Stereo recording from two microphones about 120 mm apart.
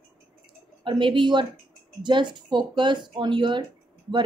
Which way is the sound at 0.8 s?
45° right (ahead or behind).